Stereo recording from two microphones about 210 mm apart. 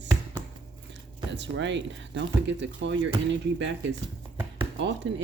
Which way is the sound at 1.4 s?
60° right (ahead or behind).